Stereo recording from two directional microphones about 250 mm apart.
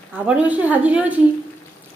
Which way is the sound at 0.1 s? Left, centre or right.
Centre.